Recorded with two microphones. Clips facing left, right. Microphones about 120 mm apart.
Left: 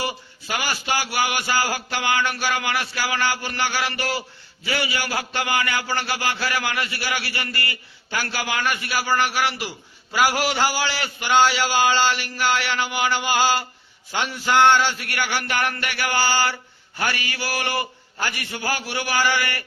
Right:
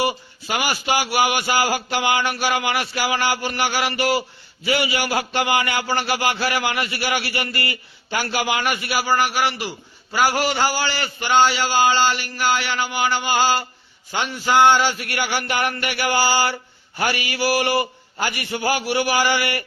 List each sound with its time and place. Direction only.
0.0 s a man's voice: 15° right (ahead or behind)